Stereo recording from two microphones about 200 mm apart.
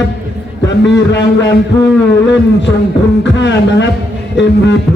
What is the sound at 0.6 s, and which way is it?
A man's voice, 60° left (ahead or behind).